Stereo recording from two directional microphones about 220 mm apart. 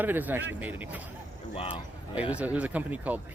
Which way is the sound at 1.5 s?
25° left (ahead or behind).